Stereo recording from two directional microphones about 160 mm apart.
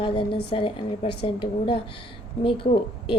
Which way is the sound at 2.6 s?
45° left (ahead or behind).